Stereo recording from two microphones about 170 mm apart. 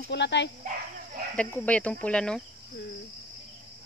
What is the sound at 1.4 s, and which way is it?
Speech, 10° left (ahead or behind).